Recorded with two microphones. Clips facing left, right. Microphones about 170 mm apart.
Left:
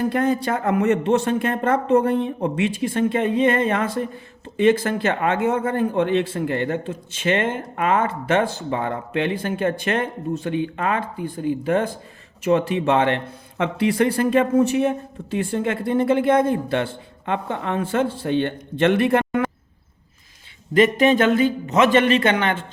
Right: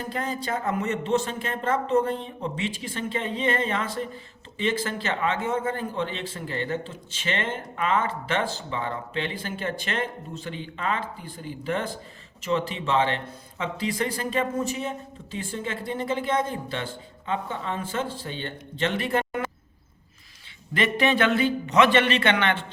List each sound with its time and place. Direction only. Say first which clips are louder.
0.0 s speech: left 10 dB; 60° left (ahead or behind)
20.7 s a man's voice: left 7 dB; 45° left (ahead or behind)